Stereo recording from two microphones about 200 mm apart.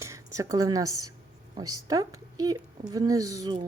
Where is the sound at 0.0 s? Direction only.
15° right (ahead or behind).